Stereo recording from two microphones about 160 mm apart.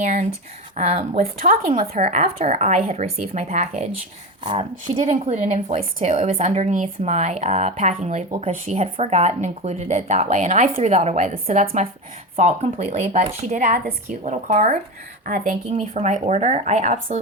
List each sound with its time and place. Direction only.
0.0 s speech: 50° right (ahead or behind)
1.2 s speech: 60° right (ahead or behind)
1.9 s speech: 45° right (ahead or behind)